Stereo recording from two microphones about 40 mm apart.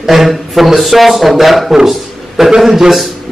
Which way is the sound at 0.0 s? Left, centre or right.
Centre.